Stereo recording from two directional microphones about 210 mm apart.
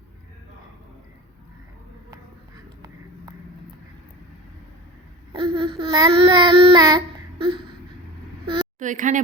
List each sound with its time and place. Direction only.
5.3 s child singing: 25° right (ahead or behind)
8.8 s speech: 35° right (ahead or behind)